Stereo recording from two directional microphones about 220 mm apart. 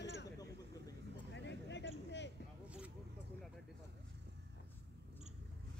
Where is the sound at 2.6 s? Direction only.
5° right (ahead or behind).